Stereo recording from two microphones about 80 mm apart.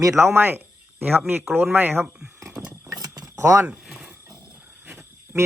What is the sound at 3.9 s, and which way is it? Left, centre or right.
Wild animals, centre.